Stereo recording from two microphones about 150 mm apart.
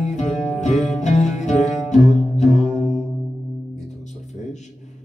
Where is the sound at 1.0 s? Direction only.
50° left (ahead or behind).